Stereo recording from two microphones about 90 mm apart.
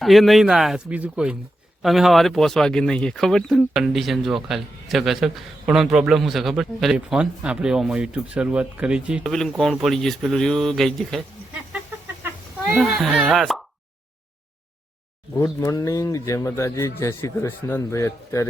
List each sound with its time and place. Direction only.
0.0 s speech: centre (ahead or behind)
0.9 s speech: 15° right (ahead or behind)
6.9 s speech: 10° right (ahead or behind)
9.2 s speech: 5° left (ahead or behind)
12.8 s speech: centre (ahead or behind)
15.4 s speech: 40° left (ahead or behind)